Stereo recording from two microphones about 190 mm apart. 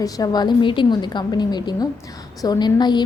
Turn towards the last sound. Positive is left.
turn(degrees=20)  # may be behind; listen again after turning